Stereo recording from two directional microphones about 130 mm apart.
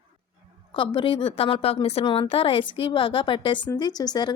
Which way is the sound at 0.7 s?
40° left (ahead or behind).